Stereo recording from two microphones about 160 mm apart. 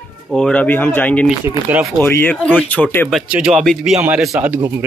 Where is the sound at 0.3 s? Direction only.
5° left (ahead or behind).